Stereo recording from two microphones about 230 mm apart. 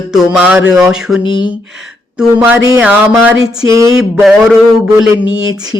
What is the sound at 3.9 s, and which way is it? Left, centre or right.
Speech, centre.